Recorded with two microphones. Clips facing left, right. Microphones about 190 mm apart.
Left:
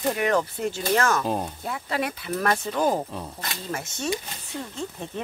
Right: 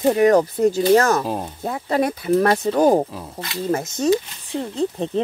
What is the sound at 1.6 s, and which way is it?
Speech, 40° right (ahead or behind).